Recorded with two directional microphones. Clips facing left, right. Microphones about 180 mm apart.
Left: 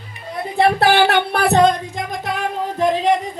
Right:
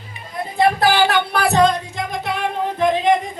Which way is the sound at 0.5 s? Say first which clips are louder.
Left 2 dB; 65° left (ahead or behind).